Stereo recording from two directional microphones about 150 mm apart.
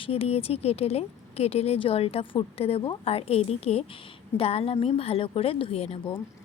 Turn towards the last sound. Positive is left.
turn(degrees=40)  # may be behind; listen again after turning